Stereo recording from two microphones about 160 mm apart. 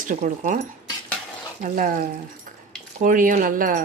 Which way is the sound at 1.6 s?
55° right (ahead or behind).